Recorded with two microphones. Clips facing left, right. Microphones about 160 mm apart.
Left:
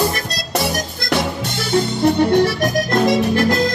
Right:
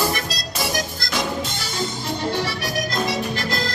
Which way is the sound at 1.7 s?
60° left (ahead or behind).